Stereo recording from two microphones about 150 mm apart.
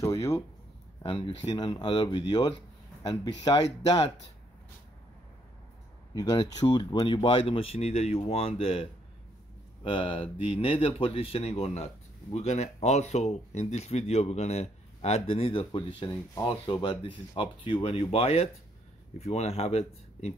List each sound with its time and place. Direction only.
0.0 s a sound: 20° left (ahead or behind)
1.0 s speech: 35° left (ahead or behind)
6.1 s speech: 30° left (ahead or behind)
9.8 s speech: 35° left (ahead or behind)
16.1 s speech: 25° left (ahead or behind); by 20.3 s 45° left (ahead or behind)